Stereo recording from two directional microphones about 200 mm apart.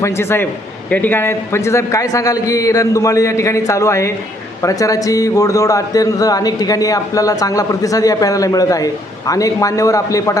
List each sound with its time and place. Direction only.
0.0 s speech: 10° left (ahead or behind)